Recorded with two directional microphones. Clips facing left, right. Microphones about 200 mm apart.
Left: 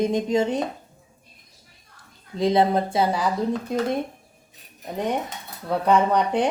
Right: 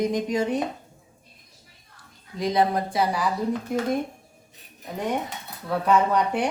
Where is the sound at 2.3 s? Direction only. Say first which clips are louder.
Left 3 dB; 25° left (ahead or behind).